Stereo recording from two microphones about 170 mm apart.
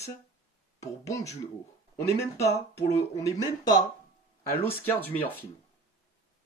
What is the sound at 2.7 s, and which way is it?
Speech, 20° left (ahead or behind).